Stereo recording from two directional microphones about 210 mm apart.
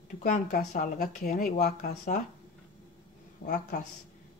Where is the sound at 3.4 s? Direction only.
35° left (ahead or behind).